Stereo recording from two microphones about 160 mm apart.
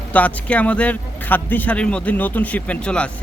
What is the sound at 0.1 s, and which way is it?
Speech, 10° left (ahead or behind).